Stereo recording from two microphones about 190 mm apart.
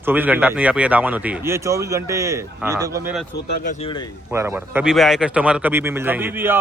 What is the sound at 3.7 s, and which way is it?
Speech, 30° left (ahead or behind).